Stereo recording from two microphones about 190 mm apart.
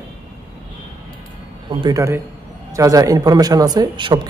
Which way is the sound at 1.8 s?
15° right (ahead or behind).